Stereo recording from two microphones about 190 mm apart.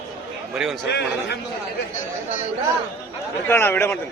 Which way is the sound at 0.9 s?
60° left (ahead or behind).